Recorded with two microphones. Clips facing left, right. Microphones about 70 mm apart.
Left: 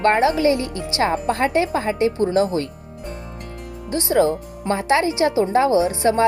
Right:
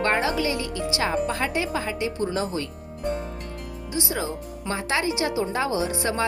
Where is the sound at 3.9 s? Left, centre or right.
Left.